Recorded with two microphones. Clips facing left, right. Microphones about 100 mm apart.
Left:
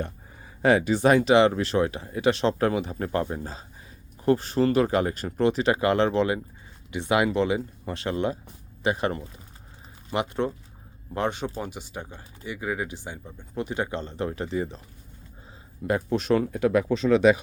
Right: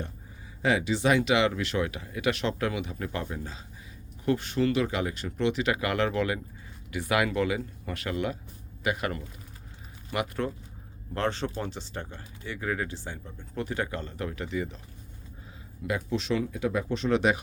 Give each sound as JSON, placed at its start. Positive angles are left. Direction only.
{"t": 0.6, "sound": "speech", "side_deg": 45}
{"t": 15.9, "sound": "speech", "side_deg": 45}